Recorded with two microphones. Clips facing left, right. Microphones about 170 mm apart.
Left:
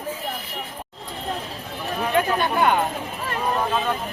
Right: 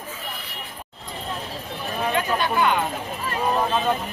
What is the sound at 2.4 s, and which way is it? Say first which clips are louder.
Speech: left 1 dB; 50° left (ahead or behind).